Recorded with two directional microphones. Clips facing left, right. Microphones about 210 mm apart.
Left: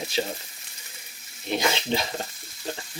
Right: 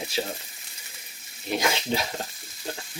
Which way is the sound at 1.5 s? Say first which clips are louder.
Left 1 dB; 5° right (ahead or behind).